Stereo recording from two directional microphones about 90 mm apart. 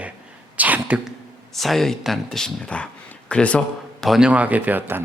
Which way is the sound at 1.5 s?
Centre (ahead or behind).